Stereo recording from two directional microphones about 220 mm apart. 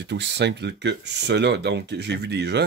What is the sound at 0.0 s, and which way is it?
Speech, 50° right (ahead or behind).